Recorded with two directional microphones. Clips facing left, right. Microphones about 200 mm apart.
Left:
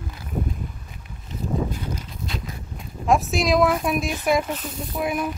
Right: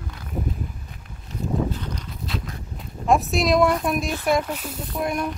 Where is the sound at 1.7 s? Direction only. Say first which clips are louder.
Left 1 dB; 5° left (ahead or behind).